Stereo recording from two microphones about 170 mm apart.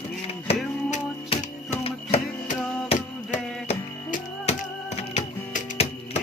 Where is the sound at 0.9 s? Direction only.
40° left (ahead or behind).